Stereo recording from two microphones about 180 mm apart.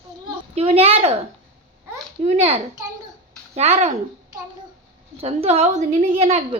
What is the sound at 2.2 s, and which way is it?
A woman's voice, 35° right (ahead or behind).